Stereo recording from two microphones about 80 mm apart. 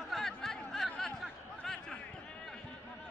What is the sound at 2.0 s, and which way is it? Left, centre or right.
Basketball bounce, centre.